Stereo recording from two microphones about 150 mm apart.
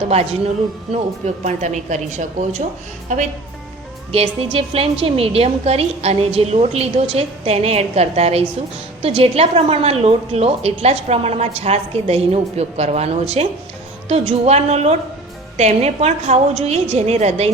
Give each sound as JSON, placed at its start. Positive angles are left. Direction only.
{"t": 0.1, "sound": "a woman's voice", "side_deg": -45}
{"t": 4.1, "sound": "a woman's voice", "side_deg": -40}